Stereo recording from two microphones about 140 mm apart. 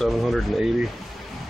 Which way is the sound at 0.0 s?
Centre (ahead or behind).